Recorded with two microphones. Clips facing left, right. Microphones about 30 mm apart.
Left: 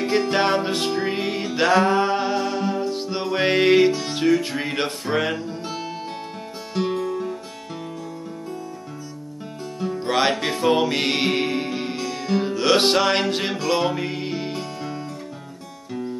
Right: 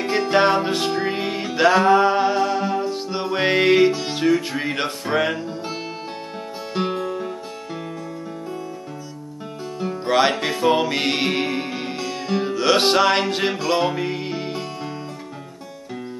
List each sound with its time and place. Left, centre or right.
0.0 s music: centre
6.8 s music: right
9.9 s music: centre